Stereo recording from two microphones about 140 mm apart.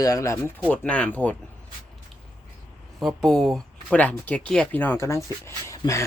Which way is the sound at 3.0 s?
Centre (ahead or behind).